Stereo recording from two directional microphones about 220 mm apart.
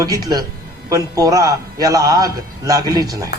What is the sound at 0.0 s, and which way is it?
A man's voice, 15° right (ahead or behind).